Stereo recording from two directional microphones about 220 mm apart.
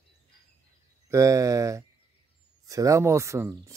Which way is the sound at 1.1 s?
15° right (ahead or behind).